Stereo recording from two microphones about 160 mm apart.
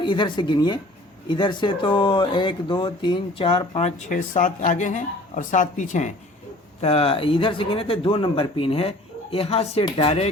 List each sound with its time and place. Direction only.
0.0 s speech: 30° left (ahead or behind); by 6.1 s 50° left (ahead or behind)
6.8 s speech: 35° left (ahead or behind)